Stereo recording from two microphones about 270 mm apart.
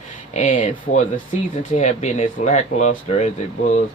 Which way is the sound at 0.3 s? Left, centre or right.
Left.